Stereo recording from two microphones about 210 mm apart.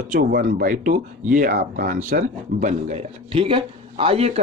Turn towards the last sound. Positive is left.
turn(degrees=-30)  # may be behind; listen again after turning